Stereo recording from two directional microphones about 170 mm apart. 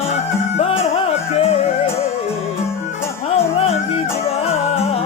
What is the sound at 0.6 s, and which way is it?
Music, 35° left (ahead or behind).